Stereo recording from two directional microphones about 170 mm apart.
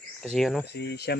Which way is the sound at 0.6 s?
75° left (ahead or behind).